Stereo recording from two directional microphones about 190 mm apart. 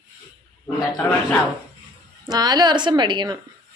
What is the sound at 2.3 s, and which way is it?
Speech, 20° right (ahead or behind).